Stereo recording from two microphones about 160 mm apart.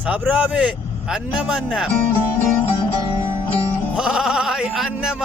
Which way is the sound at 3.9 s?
5° right (ahead or behind).